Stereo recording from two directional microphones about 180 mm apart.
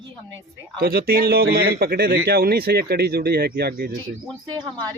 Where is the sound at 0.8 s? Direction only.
60° right (ahead or behind).